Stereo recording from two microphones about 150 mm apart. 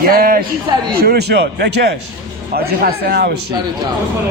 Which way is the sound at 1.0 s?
90° right.